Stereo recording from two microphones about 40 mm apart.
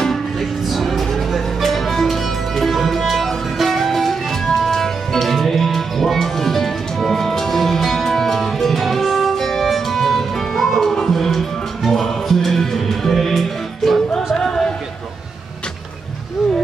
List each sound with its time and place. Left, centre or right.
0.7 s music: centre
14.1 s music: centre